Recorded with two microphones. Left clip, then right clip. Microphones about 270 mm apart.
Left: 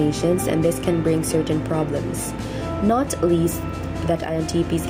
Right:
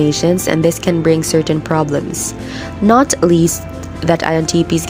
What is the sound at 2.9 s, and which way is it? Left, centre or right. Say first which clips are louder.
Speech: right 9 dB; right.